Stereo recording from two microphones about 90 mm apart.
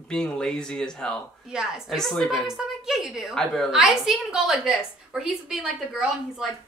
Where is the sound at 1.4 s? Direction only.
10° right (ahead or behind).